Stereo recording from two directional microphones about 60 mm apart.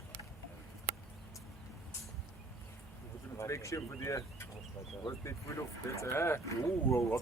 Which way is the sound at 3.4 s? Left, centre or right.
Left.